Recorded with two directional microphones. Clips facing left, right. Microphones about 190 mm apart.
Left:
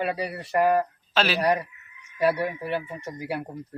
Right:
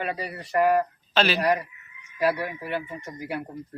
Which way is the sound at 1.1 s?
5° left (ahead or behind).